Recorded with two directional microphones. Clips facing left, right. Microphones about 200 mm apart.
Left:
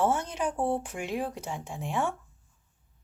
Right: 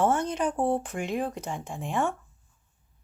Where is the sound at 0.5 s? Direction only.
20° right (ahead or behind).